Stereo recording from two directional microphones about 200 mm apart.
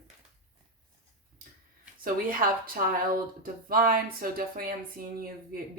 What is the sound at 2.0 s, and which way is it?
Speech, 45° right (ahead or behind).